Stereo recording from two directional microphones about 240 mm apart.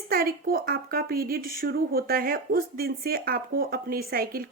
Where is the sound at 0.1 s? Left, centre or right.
Right.